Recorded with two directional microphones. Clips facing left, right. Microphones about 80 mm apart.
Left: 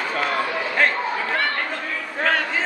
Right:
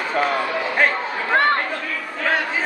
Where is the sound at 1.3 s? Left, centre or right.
Right.